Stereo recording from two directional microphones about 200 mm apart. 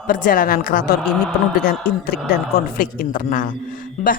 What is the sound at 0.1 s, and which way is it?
Speech, 45° left (ahead or behind).